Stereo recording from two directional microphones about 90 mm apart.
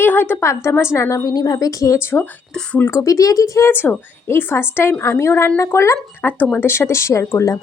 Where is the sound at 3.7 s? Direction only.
25° left (ahead or behind).